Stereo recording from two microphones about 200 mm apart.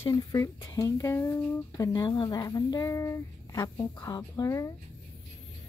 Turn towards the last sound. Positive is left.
turn(degrees=15)  # may be behind; listen again after turning